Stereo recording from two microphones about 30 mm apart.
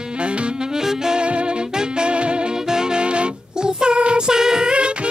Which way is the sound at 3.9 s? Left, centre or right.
Right.